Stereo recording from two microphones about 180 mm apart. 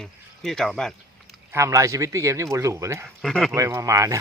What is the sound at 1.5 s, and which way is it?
Speech, 15° right (ahead or behind).